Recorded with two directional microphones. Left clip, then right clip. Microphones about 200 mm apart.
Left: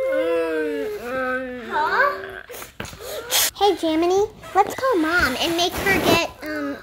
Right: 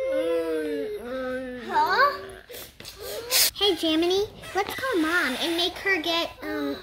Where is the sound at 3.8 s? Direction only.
30° left (ahead or behind).